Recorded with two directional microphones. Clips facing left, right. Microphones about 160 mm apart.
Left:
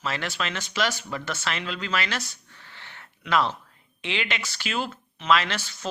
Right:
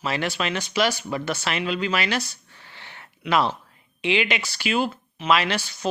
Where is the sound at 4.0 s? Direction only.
15° right (ahead or behind).